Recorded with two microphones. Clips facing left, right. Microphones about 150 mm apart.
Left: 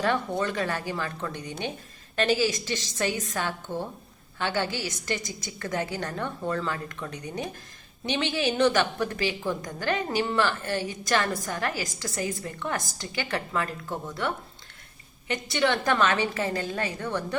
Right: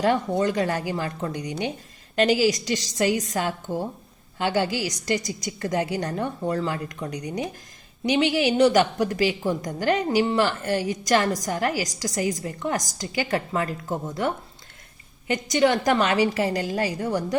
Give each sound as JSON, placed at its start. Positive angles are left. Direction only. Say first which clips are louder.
{"t": 0.0, "sound": "a woman's voice", "louder": "right 5 dB", "side_deg": -20}
{"t": 11.8, "sound": "a woman's voice", "louder": "right 5 dB", "side_deg": -40}
{"t": 12.0, "sound": "a woman's voice", "louder": "right 5 dB", "side_deg": -15}
{"t": 12.3, "sound": "a woman's voice", "louder": "right 4 dB", "side_deg": -35}
{"t": 15.4, "sound": "a woman's voice", "louder": "right 5 dB", "side_deg": -40}
{"t": 15.9, "sound": "speech", "louder": "right 4 dB", "side_deg": -20}
{"t": 17.0, "sound": "a woman's voice", "louder": "right 5 dB", "side_deg": -35}